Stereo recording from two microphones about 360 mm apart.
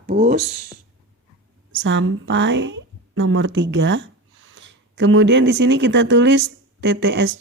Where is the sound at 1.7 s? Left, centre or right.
Right.